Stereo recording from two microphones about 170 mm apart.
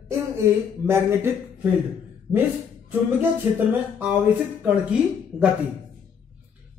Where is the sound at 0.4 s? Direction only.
15° right (ahead or behind).